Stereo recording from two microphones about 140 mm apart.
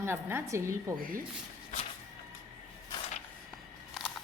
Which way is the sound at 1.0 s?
90° right.